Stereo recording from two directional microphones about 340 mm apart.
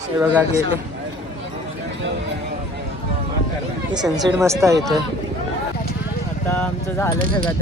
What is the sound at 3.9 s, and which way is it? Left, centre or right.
Speech, centre.